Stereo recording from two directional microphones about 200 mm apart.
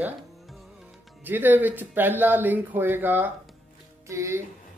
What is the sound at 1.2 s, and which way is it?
A woman's voice, 10° right (ahead or behind).